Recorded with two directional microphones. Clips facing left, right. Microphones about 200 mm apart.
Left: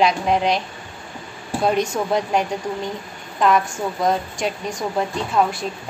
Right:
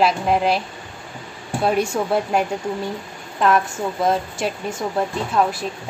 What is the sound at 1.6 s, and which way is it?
A woman's voice, 5° right (ahead or behind).